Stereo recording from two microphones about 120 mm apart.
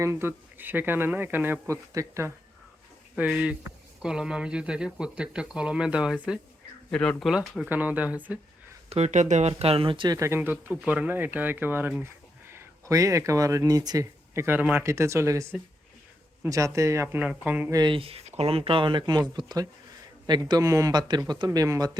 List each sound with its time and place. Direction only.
0.0 s speech: 20° right (ahead or behind)
3.2 s speech: 5° right (ahead or behind)
6.9 s speech: 5° left (ahead or behind)
7.3 s speech: 5° right (ahead or behind)
8.9 s speech: 65° right (ahead or behind); by 10.1 s 45° right (ahead or behind)
10.1 s speech: 25° right (ahead or behind)
14.4 s speech: 15° right (ahead or behind)
17.7 s speech: 35° right (ahead or behind)
17.9 s speech: 50° right (ahead or behind); by 21.9 s 30° right (ahead or behind)